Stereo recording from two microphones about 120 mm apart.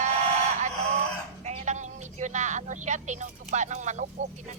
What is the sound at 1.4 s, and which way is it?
Speech, 70° right (ahead or behind).